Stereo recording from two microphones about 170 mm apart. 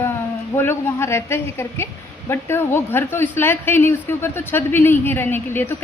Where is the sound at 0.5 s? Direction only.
15° left (ahead or behind).